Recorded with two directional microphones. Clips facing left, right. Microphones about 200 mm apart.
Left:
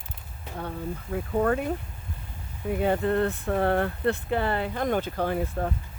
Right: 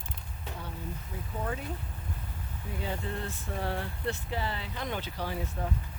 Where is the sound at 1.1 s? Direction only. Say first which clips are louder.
Left 13 dB; 65° left (ahead or behind).